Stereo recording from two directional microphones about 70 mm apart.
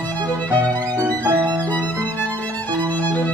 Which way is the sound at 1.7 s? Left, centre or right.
Left.